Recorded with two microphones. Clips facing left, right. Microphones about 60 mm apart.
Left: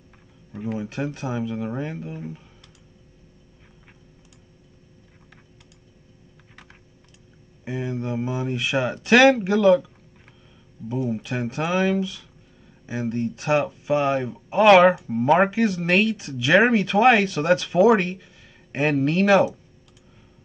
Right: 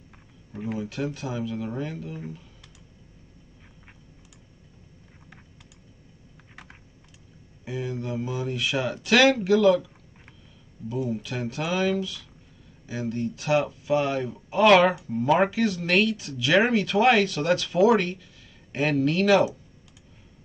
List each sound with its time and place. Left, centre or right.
0.5 s a sound: centre
0.7 s speech: left
7.6 s speech: left
11.1 s speech: left